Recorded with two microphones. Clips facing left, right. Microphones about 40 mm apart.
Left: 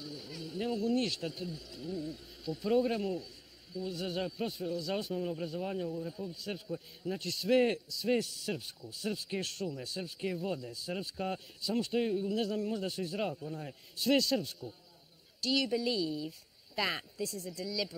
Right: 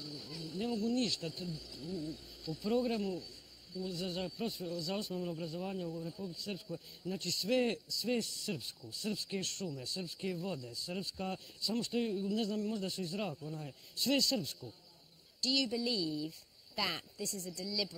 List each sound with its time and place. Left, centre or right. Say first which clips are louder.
0.0 s a man's voice: left 2 dB; centre